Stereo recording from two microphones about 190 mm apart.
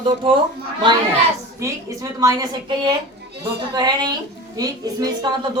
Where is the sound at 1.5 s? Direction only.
15° right (ahead or behind).